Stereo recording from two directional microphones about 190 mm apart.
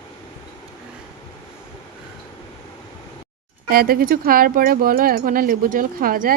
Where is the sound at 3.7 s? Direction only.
50° right (ahead or behind).